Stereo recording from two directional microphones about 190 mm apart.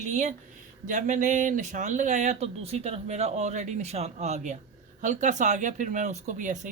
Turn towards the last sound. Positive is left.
turn(degrees=-40)  # may be behind; listen again after turning